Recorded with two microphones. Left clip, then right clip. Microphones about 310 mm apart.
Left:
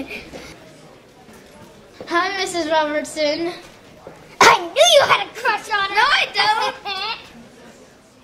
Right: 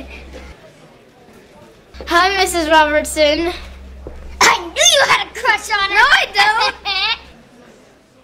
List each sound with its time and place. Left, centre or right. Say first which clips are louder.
2.0 s speech: right 7 dB; right
4.4 s dog: left 1 dB; left
4.7 s a sound: right 1 dB; left
5.9 s a woman's voice: right 5 dB; right